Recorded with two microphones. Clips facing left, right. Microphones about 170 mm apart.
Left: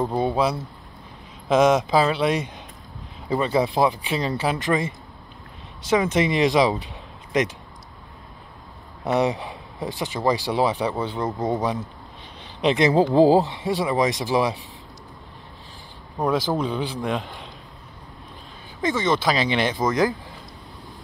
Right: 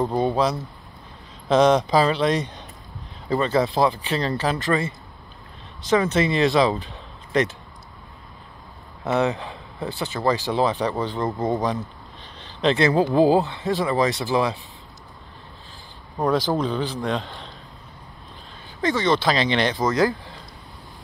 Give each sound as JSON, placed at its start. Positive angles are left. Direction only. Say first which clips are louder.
{"t": 0.0, "sound": "speech", "louder": "right 1 dB", "side_deg": 10}
{"t": 9.0, "sound": "speech", "louder": "even", "side_deg": 15}
{"t": 13.1, "sound": "speech", "louder": "left 2 dB", "side_deg": 25}
{"t": 16.2, "sound": "speech", "louder": "right 1 dB", "side_deg": 10}
{"t": 19.1, "sound": "speech", "louder": "right 1 dB", "side_deg": 10}